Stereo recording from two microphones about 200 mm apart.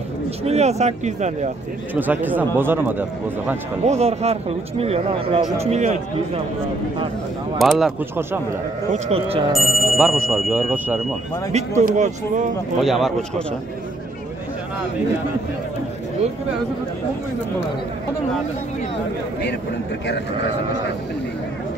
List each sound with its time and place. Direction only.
0.4 s speech: 30° right (ahead or behind)
2.0 s speech: 10° right (ahead or behind)
3.8 s speech: 35° right (ahead or behind)
7.5 s speech: centre (ahead or behind)
8.9 s speech: 30° right (ahead or behind)
9.5 s speech: centre (ahead or behind)
11.5 s speech: 35° right (ahead or behind)
12.8 s speech: centre (ahead or behind)